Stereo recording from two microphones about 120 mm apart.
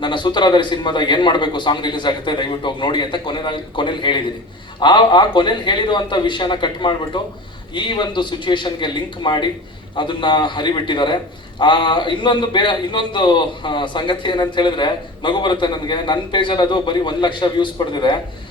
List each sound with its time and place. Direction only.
0.0 s a man's voice: 40° left (ahead or behind)